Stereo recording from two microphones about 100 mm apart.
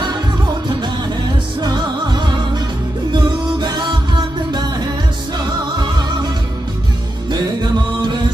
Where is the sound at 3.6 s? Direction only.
45° right (ahead or behind).